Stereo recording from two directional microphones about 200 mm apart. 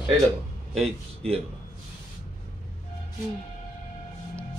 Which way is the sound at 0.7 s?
30° right (ahead or behind).